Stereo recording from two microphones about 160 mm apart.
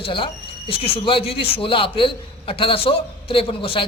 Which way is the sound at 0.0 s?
35° left (ahead or behind).